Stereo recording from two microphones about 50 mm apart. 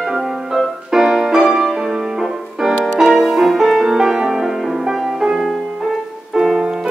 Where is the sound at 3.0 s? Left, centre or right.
Centre.